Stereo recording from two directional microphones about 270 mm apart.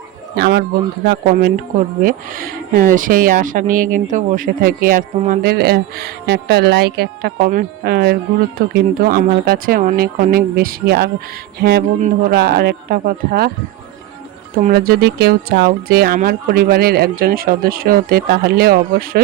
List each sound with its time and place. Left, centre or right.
0.3 s speech: right
12.3 s speech: right
14.6 s speech: right